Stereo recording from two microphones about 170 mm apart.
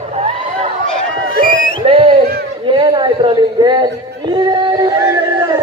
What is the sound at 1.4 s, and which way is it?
Music, 55° left (ahead or behind).